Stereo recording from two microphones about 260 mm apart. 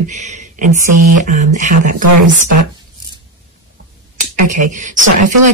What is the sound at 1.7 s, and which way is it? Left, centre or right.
Speech, right.